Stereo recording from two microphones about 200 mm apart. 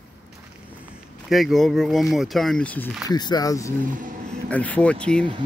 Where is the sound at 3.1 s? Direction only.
20° left (ahead or behind).